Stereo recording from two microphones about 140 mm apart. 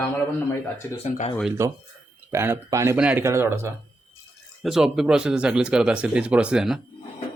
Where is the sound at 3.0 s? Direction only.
10° right (ahead or behind).